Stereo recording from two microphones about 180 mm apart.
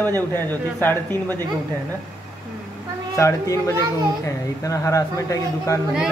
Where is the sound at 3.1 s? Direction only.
15° left (ahead or behind).